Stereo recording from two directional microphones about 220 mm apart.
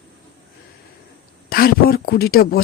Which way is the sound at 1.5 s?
40° left (ahead or behind).